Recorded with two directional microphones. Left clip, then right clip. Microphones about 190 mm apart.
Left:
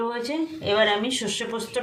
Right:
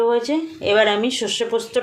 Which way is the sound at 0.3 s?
40° right (ahead or behind).